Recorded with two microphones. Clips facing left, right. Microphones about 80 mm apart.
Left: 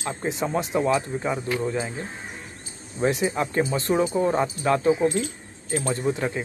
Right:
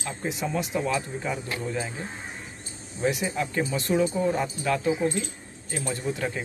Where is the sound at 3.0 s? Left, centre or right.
Left.